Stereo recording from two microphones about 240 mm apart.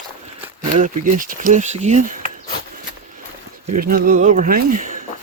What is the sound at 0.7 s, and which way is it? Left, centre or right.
Speech, right.